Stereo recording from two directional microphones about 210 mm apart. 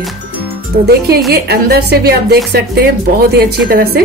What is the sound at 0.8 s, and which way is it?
A woman's voice, 50° right (ahead or behind).